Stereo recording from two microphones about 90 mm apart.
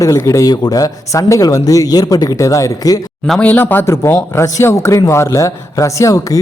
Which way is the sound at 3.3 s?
20° left (ahead or behind).